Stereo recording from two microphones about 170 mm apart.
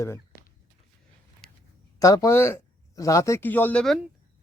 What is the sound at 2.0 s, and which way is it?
Speech, 20° left (ahead or behind).